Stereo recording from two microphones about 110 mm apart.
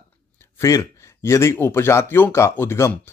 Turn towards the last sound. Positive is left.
turn(degrees=25)  # may be behind; listen again after turning